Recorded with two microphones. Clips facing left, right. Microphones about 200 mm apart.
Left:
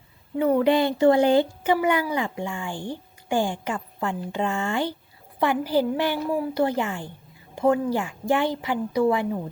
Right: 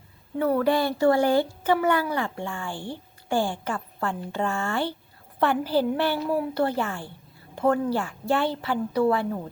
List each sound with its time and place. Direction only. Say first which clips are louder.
0.3 s speech: left 3 dB; 15° left (ahead or behind)